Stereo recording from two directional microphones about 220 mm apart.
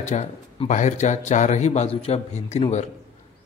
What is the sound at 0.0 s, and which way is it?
A man's voice, 30° left (ahead or behind).